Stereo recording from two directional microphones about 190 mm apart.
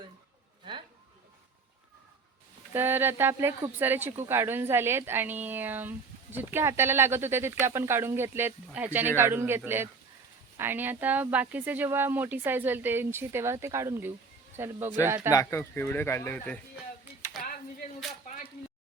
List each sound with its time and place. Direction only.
2.7 s speech: 10° right (ahead or behind)
15.3 s speech: 15° left (ahead or behind)
17.4 s a sound: 45° left (ahead or behind)